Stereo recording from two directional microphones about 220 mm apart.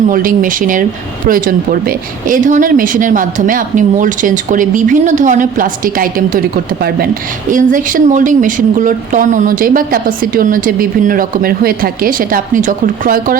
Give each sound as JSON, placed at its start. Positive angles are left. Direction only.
{"t": 0.1, "sound": "a woman's voice", "side_deg": -40}
{"t": 7.5, "sound": "a woman's voice", "side_deg": -35}